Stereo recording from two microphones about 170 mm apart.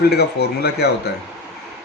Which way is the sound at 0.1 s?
75° left (ahead or behind).